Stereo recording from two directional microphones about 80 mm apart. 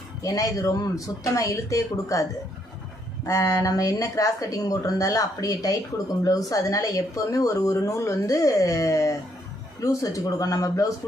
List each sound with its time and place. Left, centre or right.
0.2 s speech: left
3.2 s speech: left